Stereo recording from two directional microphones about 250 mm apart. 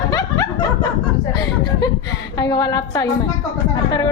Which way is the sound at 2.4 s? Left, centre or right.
Centre.